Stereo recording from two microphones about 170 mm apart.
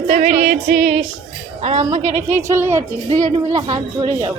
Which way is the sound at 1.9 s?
45° right (ahead or behind).